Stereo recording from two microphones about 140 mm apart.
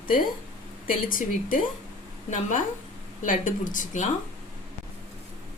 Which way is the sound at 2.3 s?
60° left (ahead or behind).